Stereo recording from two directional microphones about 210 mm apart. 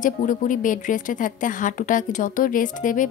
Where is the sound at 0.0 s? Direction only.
40° left (ahead or behind).